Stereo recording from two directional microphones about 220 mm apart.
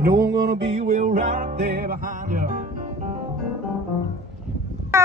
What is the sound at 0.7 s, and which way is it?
Music, 30° right (ahead or behind).